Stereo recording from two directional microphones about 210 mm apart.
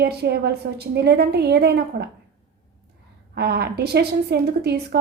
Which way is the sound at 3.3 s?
50° right (ahead or behind).